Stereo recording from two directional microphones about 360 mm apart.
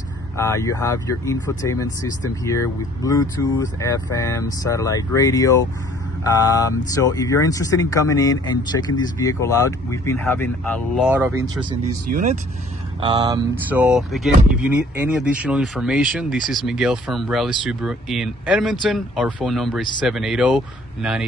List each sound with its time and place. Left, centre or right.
0.4 s speech: centre
6.9 s speech: centre
12.1 s speech: right
13.0 s speech: centre